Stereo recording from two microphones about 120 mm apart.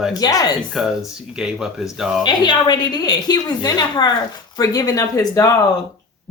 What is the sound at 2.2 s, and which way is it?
A woman's voice, 35° left (ahead or behind).